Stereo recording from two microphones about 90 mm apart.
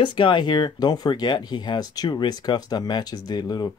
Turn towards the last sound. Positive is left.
turn(degrees=50)  # may be behind; listen again after turning